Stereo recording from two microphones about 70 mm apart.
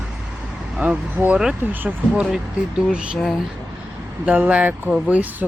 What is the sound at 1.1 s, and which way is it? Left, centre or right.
Speech, right.